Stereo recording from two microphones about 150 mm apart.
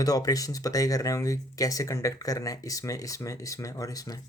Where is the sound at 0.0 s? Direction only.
25° left (ahead or behind).